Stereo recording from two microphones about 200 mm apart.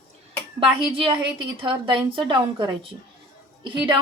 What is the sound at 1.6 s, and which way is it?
A woman's voice, 25° right (ahead or behind).